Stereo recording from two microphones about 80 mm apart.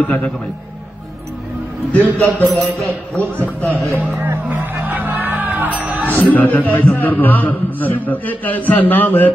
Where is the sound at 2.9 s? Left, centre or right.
Right.